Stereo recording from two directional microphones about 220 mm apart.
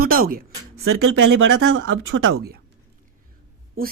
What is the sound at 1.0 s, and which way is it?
Speech, 55° right (ahead or behind).